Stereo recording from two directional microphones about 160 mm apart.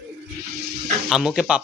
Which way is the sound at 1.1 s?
Centre (ahead or behind).